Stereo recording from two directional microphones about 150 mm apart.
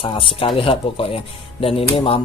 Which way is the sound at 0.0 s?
35° left (ahead or behind).